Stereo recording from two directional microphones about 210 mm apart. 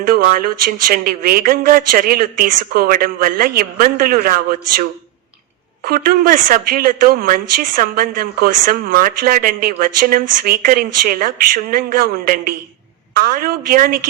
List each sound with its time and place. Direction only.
0.0 s speech: 40° right (ahead or behind)
5.8 s speech: 45° right (ahead or behind)